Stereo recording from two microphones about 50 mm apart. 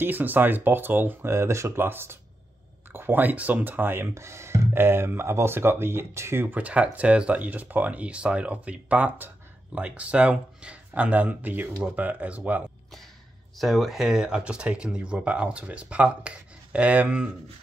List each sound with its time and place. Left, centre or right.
0.0 s speech: right
1.3 s speech: right
1.8 s speech: right
4.1 s speech: right
6.4 s speech: right
7.4 s speech: right
13.6 s speech: centre; by 17.2 s right